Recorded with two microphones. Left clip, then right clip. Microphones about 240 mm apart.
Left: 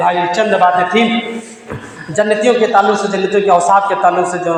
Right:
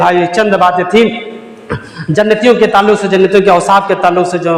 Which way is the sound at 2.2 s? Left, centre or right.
Right.